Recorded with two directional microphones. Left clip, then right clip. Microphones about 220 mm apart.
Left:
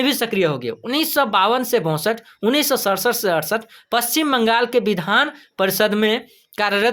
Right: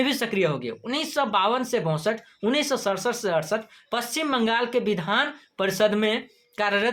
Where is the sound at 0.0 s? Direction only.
40° left (ahead or behind).